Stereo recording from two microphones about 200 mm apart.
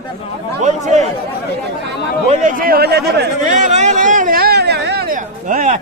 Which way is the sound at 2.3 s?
40° right (ahead or behind).